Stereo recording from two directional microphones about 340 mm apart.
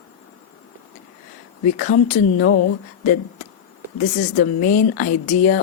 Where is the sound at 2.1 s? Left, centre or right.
Left.